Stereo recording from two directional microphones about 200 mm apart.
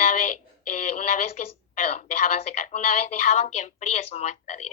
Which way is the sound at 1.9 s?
35° left (ahead or behind).